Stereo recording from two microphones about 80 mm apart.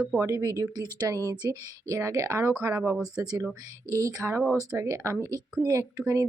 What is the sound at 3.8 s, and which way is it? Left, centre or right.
Speech, right.